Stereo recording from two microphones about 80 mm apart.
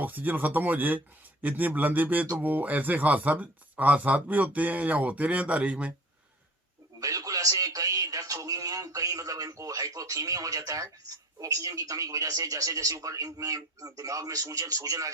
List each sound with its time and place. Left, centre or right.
0.0 s speech: right
7.0 s speech: right